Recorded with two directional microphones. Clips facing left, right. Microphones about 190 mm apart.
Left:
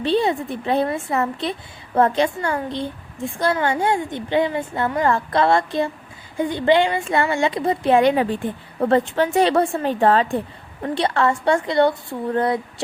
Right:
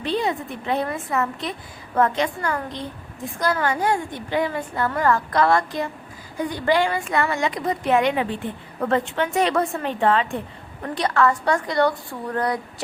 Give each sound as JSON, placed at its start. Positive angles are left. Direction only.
{"t": 0.0, "sound": "a woman's voice", "side_deg": 30}
{"t": 10.9, "sound": "a woman's voice", "side_deg": 25}